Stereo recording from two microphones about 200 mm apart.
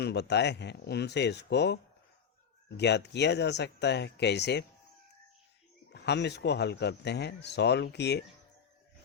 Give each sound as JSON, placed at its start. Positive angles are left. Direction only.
{"t": 0.0, "sound": "speech", "side_deg": 55}
{"t": 5.9, "sound": "speech", "side_deg": 55}